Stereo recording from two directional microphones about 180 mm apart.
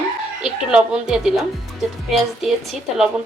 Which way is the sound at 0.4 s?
5° right (ahead or behind).